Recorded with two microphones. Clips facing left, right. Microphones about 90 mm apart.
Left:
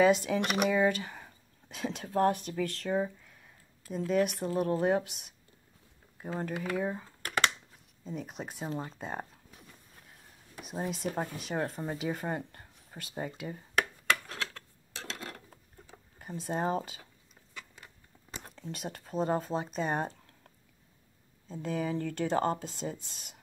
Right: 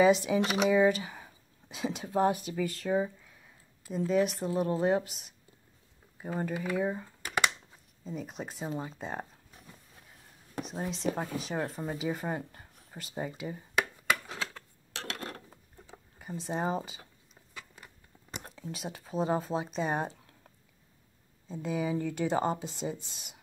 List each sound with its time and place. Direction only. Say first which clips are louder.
0.0 s speech: right 1 dB; centre (ahead or behind)
0.4 s speech: right 1 dB; 55° left (ahead or behind)
0.7 s speech: right 5 dB; 5° right (ahead or behind)
7.2 s a sound: even; 15° right (ahead or behind)
8.0 s speech: right 1 dB; centre (ahead or behind)
10.6 s speech: right 1 dB; 5° left (ahead or behind)
14.0 s a sound: even; 5° right (ahead or behind)
14.9 s cutlery: right 3 dB; 60° right (ahead or behind)
16.2 s speech: even; centre (ahead or behind)
18.4 s speech: even; 5° right (ahead or behind)
21.5 s speech: right 1 dB; 5° right (ahead or behind)